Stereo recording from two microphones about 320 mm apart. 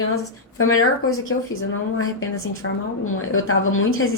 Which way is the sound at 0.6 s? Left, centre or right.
Left.